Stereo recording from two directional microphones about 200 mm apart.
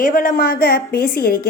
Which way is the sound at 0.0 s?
40° left (ahead or behind).